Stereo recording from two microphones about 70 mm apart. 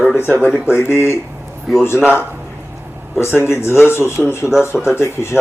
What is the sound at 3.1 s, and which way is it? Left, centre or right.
Speech, left.